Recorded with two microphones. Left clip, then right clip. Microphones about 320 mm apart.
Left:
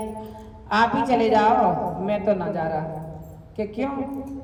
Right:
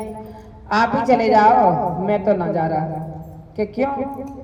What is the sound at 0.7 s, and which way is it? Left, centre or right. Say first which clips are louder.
A woman's voice: right 3 dB; centre.